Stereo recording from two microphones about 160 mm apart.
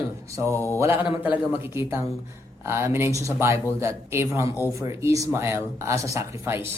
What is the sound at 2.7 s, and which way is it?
Speech, 15° right (ahead or behind).